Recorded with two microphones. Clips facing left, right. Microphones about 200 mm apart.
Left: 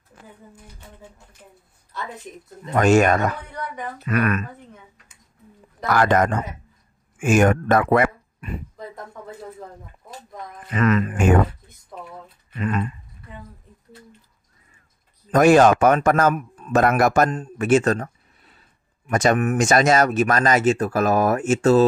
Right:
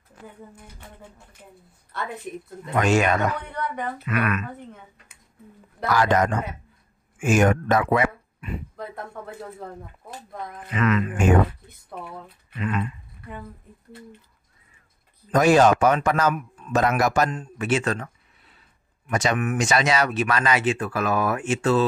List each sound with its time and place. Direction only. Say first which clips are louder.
1.9 s a woman's voice: right 1 dB; 60° right (ahead or behind)
2.7 s speech: left 4 dB; 45° left (ahead or behind)
5.9 s speech: left 2 dB; 55° left (ahead or behind)
10.7 s speech: left 3 dB; 40° left (ahead or behind)
12.5 s speech: left 2 dB; 40° left (ahead or behind)
15.3 s speech: left 3 dB; 55° left (ahead or behind)
16.8 s speech: left 4 dB; 55° left (ahead or behind)